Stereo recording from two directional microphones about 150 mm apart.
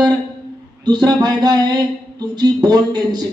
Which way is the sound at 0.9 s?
30° right (ahead or behind).